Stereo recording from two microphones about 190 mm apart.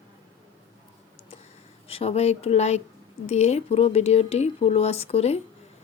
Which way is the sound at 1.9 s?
30° left (ahead or behind).